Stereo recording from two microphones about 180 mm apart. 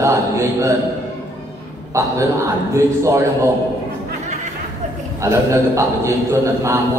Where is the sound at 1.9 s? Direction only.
15° right (ahead or behind).